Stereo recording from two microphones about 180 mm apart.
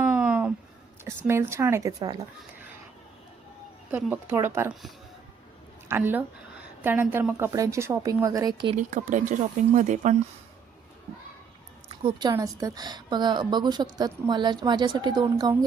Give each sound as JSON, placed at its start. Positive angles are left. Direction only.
{"t": 0.0, "sound": "a sound", "side_deg": -5}
{"t": 1.0, "sound": "a woman's voice", "side_deg": -15}
{"t": 3.9, "sound": "a woman's voice", "side_deg": -10}
{"t": 5.9, "sound": "a woman's voice", "side_deg": -10}
{"t": 8.7, "sound": "speech", "side_deg": -45}
{"t": 12.3, "sound": "speech", "side_deg": -20}